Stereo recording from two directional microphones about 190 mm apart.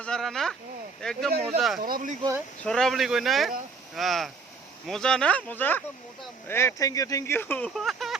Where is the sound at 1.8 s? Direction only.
45° right (ahead or behind).